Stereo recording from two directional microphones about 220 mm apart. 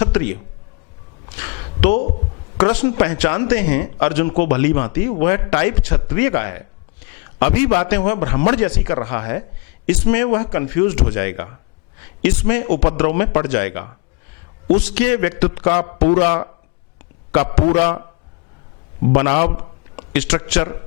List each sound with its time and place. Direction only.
0.0 s a man's voice: 15° left (ahead or behind)
1.4 s a sound: 20° left (ahead or behind)
2.6 s a man's voice: 15° left (ahead or behind)
16.0 s a man's voice: 40° left (ahead or behind)
16.2 s a man's voice: 20° left (ahead or behind)
19.1 s a man's voice: 20° left (ahead or behind)